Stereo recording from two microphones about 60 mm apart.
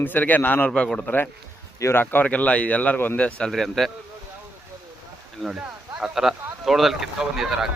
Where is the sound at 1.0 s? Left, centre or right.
Left.